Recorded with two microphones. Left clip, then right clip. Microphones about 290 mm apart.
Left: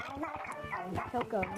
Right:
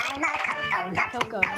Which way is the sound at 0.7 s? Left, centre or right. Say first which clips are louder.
Right 10 dB; right.